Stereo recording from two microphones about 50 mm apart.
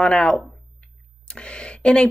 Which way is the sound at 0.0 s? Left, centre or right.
Centre.